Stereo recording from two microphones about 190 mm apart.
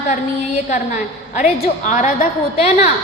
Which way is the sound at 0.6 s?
40° left (ahead or behind).